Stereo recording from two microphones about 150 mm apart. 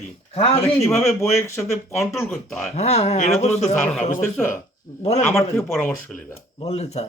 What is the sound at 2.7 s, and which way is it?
Speech, 45° left (ahead or behind).